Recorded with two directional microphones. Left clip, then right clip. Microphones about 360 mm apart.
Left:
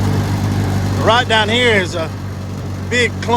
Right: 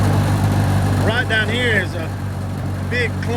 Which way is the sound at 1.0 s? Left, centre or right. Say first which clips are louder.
Left 7 dB; centre.